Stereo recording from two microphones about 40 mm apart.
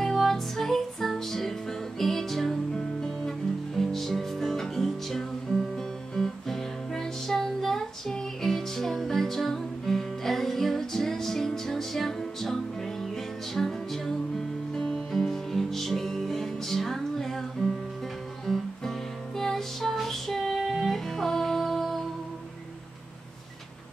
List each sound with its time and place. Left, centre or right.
0.0 s music: centre
3.7 s music: centre
13.6 s music: centre
18.5 s music: centre